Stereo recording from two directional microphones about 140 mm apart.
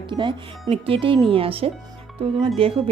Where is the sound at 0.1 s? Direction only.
35° right (ahead or behind).